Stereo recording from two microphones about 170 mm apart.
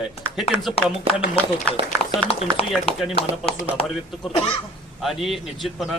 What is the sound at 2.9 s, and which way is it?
Speech, 35° left (ahead or behind).